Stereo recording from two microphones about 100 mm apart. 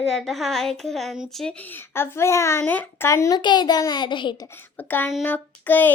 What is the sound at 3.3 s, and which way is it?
A child's voice, 45° left (ahead or behind).